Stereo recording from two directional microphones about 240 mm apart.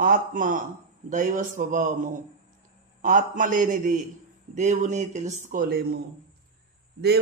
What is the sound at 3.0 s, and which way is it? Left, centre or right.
Speech, right.